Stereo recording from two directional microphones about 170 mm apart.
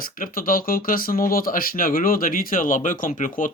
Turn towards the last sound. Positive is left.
turn(degrees=50)  # may be behind; listen again after turning